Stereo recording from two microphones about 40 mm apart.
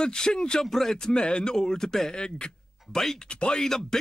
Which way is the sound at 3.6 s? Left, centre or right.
Centre.